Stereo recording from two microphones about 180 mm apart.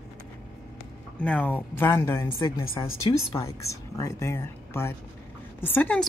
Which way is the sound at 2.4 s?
30° left (ahead or behind).